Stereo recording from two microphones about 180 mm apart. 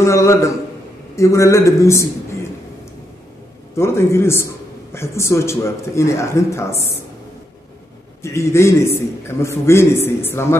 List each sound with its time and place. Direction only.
0.0 s a man's voice: 15° left (ahead or behind)
3.7 s a man's voice: 15° left (ahead or behind)
8.2 s a man's voice: 15° left (ahead or behind)